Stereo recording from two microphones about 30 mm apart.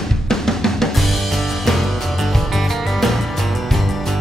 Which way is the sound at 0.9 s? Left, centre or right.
Centre.